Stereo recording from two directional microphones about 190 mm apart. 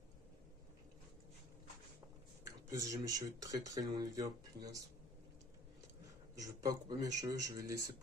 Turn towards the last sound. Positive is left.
turn(degrees=-15)  # may be behind; listen again after turning